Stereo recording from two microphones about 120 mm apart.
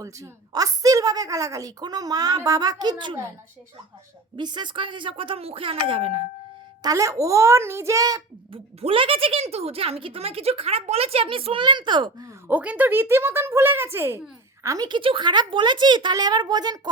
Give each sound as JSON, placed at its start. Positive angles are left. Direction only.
{"t": 0.0, "sound": "a woman's voice", "side_deg": -30}
{"t": 4.4, "sound": "speech", "side_deg": -40}
{"t": 6.8, "sound": "speech", "side_deg": -25}
{"t": 8.8, "sound": "speech", "side_deg": -50}
{"t": 12.5, "sound": "speech", "side_deg": -15}
{"t": 14.8, "sound": "a woman's voice", "side_deg": -45}